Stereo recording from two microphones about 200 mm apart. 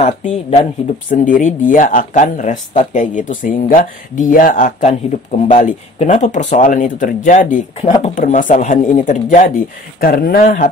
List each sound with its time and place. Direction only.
0.0 s speech: 35° left (ahead or behind)